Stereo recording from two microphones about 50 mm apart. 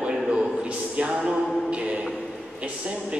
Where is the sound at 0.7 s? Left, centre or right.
Right.